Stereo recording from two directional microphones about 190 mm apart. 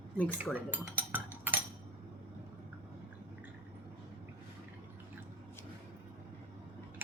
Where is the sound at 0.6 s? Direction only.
10° right (ahead or behind).